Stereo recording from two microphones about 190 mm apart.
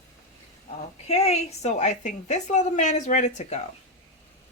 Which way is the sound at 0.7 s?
35° left (ahead or behind).